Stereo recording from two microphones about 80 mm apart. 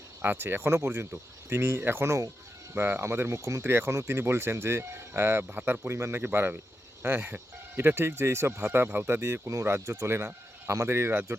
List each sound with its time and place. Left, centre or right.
0.2 s speech: right
5.9 s speech: right